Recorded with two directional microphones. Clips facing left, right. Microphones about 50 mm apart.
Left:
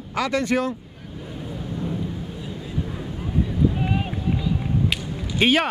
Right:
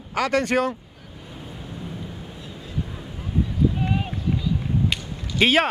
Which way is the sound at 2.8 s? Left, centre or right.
Centre.